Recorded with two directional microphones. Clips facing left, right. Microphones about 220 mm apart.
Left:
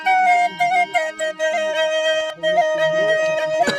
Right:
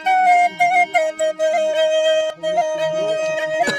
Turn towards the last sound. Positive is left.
turn(degrees=-5)  # may be behind; listen again after turning